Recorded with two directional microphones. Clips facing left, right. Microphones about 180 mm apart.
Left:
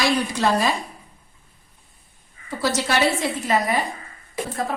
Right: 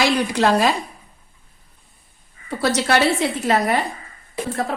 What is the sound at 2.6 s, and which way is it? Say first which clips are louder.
A woman's voice: right 3 dB; 65° right (ahead or behind).